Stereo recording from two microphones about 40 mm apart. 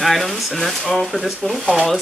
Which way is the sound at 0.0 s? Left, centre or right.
Centre.